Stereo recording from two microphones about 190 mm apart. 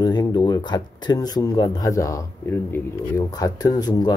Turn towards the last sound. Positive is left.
turn(degrees=20)  # may be behind; listen again after turning